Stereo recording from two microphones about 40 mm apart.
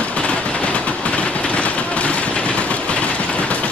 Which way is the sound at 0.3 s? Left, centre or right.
Left.